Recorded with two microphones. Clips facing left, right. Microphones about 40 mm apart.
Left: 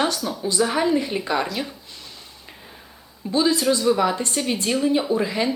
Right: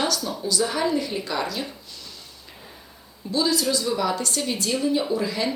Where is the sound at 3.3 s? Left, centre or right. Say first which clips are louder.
Left 3 dB; left.